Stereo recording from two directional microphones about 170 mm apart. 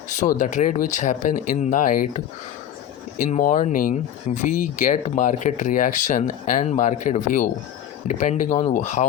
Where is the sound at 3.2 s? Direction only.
50° left (ahead or behind).